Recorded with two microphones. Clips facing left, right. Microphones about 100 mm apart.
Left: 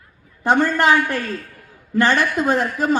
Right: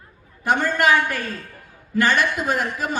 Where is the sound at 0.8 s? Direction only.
25° left (ahead or behind).